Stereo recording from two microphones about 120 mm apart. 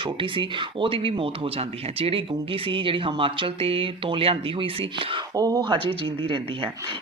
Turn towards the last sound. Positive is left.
turn(degrees=-45)  # may be behind; listen again after turning